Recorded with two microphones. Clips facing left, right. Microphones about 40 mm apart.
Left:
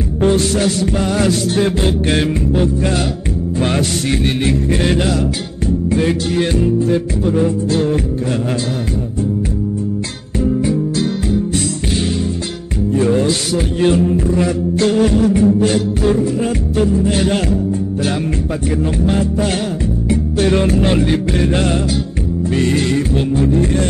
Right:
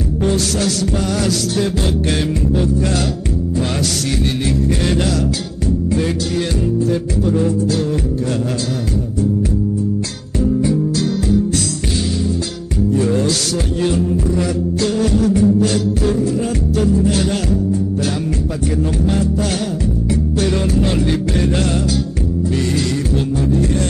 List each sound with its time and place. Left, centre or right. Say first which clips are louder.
0.2 s music: left 4 dB; left
4.2 s music: left 2 dB; left
5.9 s music: left 5 dB; left
10.4 s music: even; left
12.9 s music: left 3 dB; left
19.0 s music: left 3 dB; left